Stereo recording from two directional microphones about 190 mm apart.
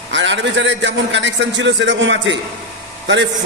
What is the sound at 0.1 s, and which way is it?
A man's voice, 75° right (ahead or behind).